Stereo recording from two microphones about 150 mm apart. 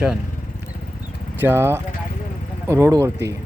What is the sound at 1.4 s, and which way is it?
Speech, 15° right (ahead or behind).